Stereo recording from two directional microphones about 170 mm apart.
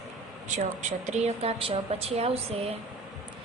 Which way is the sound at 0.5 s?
45° right (ahead or behind).